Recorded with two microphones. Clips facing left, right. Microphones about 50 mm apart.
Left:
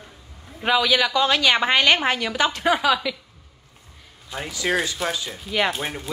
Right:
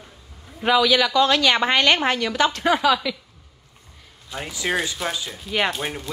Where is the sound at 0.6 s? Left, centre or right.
Centre.